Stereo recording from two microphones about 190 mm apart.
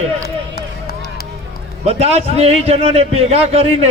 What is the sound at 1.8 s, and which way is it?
A man's voice, 35° right (ahead or behind).